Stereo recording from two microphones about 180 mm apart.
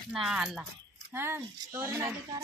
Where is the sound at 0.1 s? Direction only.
5° right (ahead or behind).